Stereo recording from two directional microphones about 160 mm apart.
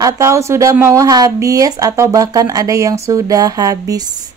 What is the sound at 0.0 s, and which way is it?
A woman's voice, 20° right (ahead or behind).